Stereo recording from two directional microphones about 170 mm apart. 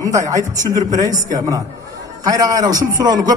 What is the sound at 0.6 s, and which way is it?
A man's voice, 20° right (ahead or behind).